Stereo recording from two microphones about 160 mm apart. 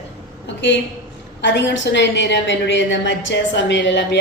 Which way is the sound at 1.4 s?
90° left.